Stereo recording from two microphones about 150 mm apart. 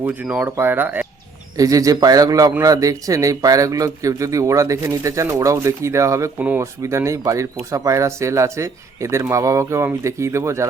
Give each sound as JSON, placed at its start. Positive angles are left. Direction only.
{"t": 0.0, "sound": "a man's voice", "side_deg": -10}